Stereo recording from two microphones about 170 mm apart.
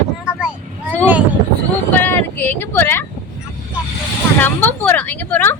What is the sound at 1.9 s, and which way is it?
A woman's voice, 10° left (ahead or behind).